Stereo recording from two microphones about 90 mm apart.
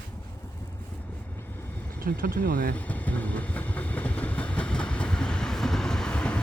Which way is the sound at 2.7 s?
20° left (ahead or behind).